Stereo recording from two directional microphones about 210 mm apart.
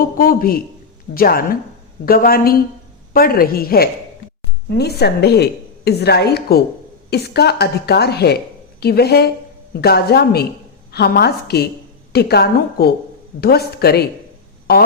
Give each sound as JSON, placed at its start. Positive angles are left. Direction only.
{"t": 0.0, "sound": "a woman's voice", "side_deg": 45}